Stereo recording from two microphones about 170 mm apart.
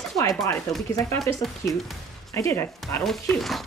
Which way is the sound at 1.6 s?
15° left (ahead or behind).